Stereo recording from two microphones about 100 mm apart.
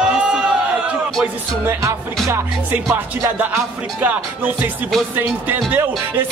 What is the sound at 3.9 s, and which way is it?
Music, 20° right (ahead or behind).